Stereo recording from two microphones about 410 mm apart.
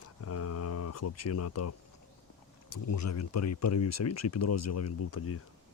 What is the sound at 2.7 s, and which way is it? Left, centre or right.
Speech, left.